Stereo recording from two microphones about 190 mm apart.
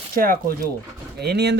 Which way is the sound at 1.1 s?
60° right (ahead or behind).